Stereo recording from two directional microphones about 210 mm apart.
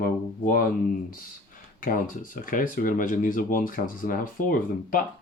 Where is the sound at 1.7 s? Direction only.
40° left (ahead or behind).